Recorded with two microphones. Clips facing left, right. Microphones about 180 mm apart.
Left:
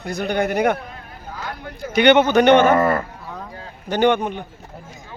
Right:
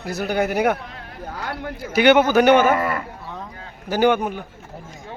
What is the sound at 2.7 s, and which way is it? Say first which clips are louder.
Speech: left 6 dB; 45° left (ahead or behind).